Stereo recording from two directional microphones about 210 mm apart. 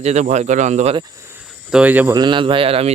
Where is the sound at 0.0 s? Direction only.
35° right (ahead or behind).